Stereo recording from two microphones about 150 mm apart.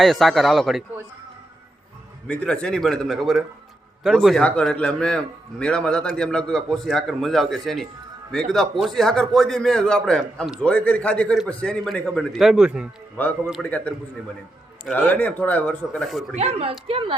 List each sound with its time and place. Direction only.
0.0 s a man's voice: centre (ahead or behind)
2.2 s a man's voice: 10° left (ahead or behind)
13.2 s a man's voice: 10° left (ahead or behind)
14.9 s a man's voice: 10° left (ahead or behind)
16.3 s speech: 45° right (ahead or behind)